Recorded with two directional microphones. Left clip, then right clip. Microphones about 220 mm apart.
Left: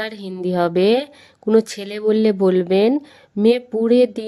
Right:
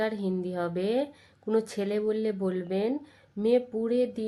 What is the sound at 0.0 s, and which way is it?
A woman's voice, 40° left (ahead or behind).